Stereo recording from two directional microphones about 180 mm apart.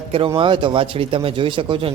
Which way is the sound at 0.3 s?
25° right (ahead or behind).